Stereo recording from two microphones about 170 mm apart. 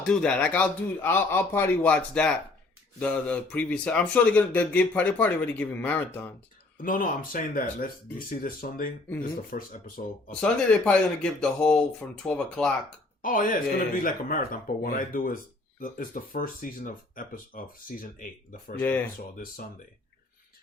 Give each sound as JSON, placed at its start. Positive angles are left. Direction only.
{"t": 0.0, "sound": "speech", "side_deg": 5}
{"t": 6.7, "sound": "speech", "side_deg": 55}
{"t": 10.4, "sound": "speech", "side_deg": 5}
{"t": 13.2, "sound": "speech", "side_deg": 55}
{"t": 18.8, "sound": "speech", "side_deg": 10}